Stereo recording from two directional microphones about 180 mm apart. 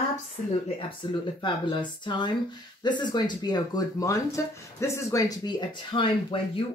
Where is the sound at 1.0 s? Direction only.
25° left (ahead or behind).